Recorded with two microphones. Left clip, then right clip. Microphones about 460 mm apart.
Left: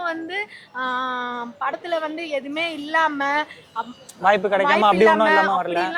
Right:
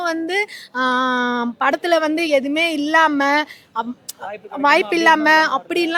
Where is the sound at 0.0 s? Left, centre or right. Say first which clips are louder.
Right 6 dB; right.